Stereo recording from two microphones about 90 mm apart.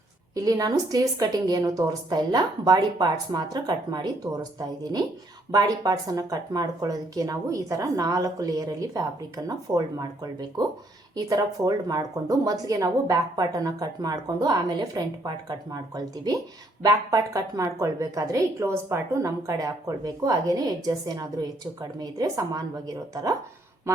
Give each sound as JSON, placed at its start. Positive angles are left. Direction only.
{"t": 0.3, "sound": "speech", "side_deg": -45}
{"t": 5.5, "sound": "speech", "side_deg": -45}
{"t": 11.3, "sound": "speech", "side_deg": -45}